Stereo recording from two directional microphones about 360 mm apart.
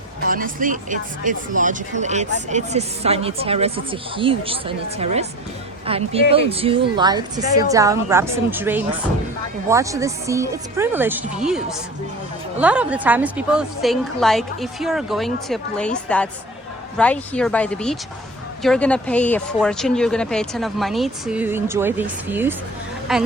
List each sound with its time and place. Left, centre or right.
0.3 s speech: right; by 23.2 s centre